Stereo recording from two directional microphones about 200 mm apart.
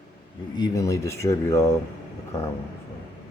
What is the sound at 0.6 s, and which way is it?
Speech, 15° left (ahead or behind).